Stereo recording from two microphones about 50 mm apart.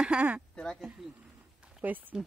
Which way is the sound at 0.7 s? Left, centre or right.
Centre.